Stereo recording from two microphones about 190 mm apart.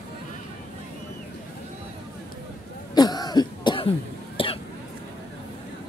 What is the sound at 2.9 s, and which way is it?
Cough, 20° left (ahead or behind).